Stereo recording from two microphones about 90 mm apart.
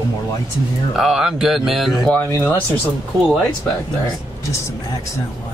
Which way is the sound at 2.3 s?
20° left (ahead or behind).